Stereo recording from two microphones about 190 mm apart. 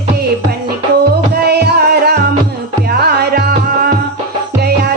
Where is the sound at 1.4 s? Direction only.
55° right (ahead or behind).